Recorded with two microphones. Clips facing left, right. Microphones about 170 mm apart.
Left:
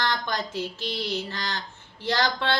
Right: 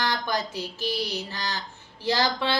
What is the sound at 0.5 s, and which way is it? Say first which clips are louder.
Speech: right 1 dB; 20° left (ahead or behind).